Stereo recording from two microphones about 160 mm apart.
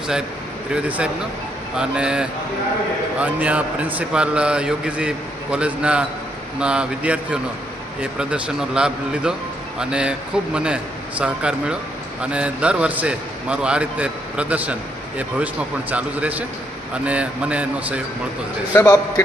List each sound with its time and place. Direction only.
0.7 s a man's voice: 10° right (ahead or behind)
15.9 s a man's voice: 10° right (ahead or behind)
18.7 s a man's voice: 15° left (ahead or behind)